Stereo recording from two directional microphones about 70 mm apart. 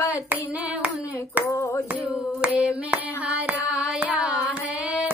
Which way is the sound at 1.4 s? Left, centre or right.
Right.